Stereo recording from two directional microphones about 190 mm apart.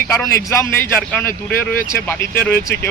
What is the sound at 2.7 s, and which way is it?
Speech, 55° left (ahead or behind).